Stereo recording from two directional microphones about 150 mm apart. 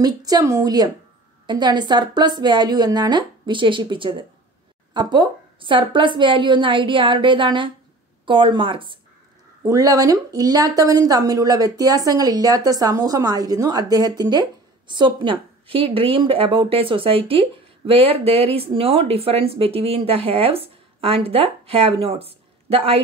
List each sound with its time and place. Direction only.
0.0 s a woman's voice: 25° right (ahead or behind)
9.6 s a woman's voice: 25° right (ahead or behind); by 23.0 s 40° right (ahead or behind)